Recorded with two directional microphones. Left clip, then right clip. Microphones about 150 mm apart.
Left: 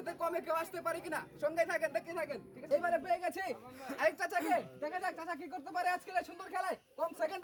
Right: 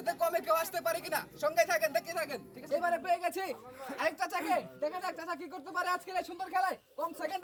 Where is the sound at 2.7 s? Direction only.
20° left (ahead or behind).